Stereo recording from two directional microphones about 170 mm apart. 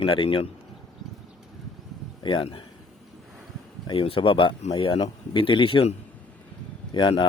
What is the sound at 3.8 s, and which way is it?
Speech, 30° left (ahead or behind).